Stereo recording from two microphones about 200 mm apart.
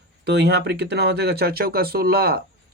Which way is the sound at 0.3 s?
55° right (ahead or behind).